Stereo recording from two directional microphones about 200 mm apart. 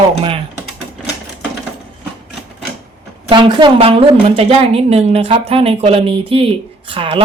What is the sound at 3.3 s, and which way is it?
A woman's voice, 25° right (ahead or behind).